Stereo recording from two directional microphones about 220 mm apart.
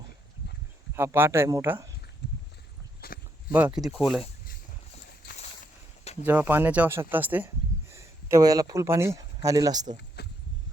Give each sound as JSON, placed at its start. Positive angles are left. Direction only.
{"t": 0.9, "sound": "speech", "side_deg": -10}
{"t": 2.2, "sound": "clip-clop", "side_deg": 50}
{"t": 3.0, "sound": "a sound", "side_deg": 45}
{"t": 3.5, "sound": "speech", "side_deg": -5}
{"t": 6.2, "sound": "speech", "side_deg": -10}
{"t": 10.2, "sound": "a sound", "side_deg": 45}